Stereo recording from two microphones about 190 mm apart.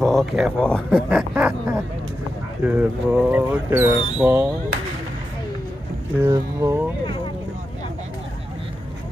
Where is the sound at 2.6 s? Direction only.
10° right (ahead or behind).